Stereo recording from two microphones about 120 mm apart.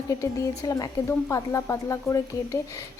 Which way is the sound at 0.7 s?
25° left (ahead or behind).